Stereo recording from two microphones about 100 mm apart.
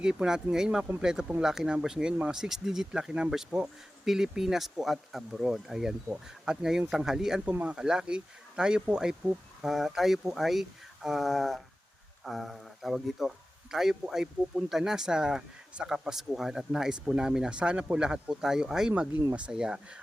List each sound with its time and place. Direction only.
0.0 s speech: 10° right (ahead or behind)